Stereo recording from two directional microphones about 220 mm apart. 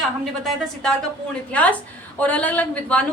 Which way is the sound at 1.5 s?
5° left (ahead or behind).